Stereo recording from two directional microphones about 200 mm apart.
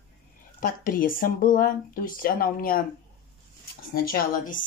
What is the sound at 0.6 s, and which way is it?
Speech, 45° left (ahead or behind).